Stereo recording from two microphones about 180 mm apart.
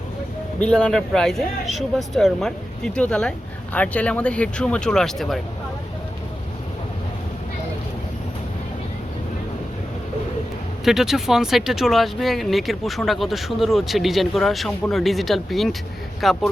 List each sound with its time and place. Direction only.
0.6 s speech: 5° left (ahead or behind)
10.8 s speech: centre (ahead or behind)